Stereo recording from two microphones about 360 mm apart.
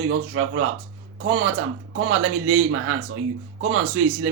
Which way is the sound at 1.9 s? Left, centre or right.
Right.